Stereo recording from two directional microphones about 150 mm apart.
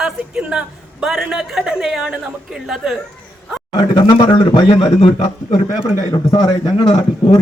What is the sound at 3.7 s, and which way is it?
Speech, 30° left (ahead or behind).